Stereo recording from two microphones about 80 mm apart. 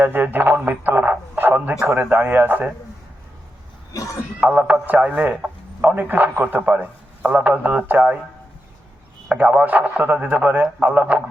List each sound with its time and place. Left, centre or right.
0.0 s a man's voice: right
1.4 s radio: right
1.8 s a man's voice: right
3.9 s speech: left
4.4 s a man's voice: centre
9.3 s a man's voice: centre